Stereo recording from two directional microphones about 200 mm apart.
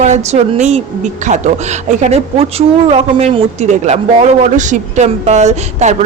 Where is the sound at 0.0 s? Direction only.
35° right (ahead or behind).